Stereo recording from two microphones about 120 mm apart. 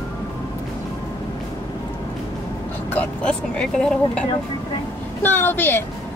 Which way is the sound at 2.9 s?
10° left (ahead or behind).